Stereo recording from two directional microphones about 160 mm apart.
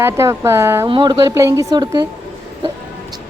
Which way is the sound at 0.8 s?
30° right (ahead or behind).